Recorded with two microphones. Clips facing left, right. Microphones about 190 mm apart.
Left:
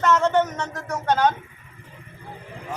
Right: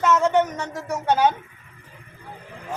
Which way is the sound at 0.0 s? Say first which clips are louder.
Even; 5° right (ahead or behind).